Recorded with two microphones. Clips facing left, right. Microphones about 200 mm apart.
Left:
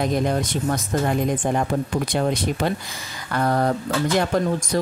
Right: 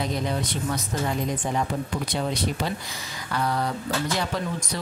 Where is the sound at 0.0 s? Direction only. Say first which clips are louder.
Left 6 dB; 50° left (ahead or behind).